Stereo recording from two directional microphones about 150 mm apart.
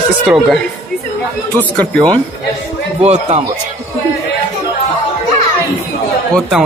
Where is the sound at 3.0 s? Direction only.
45° right (ahead or behind).